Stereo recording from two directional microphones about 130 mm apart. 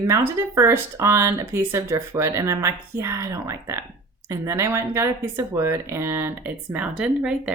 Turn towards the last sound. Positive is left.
turn(degrees=-10)  # may be behind; listen again after turning